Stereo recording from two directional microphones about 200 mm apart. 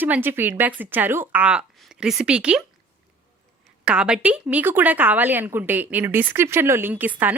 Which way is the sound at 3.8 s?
5° right (ahead or behind).